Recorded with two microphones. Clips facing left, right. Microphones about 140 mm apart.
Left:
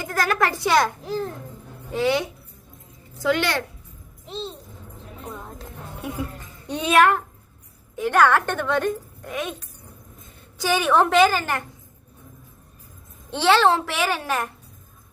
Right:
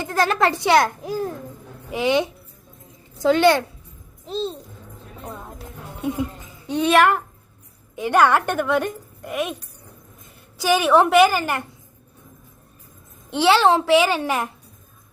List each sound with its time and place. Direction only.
0.0 s a child's voice: 25° right (ahead or behind)
1.0 s a woman's voice: 10° right (ahead or behind)
6.0 s speech: 20° right (ahead or behind)
6.7 s a child's voice: centre (ahead or behind)
7.9 s a woman's voice: 15° right (ahead or behind)
13.3 s a woman's voice: 10° right (ahead or behind)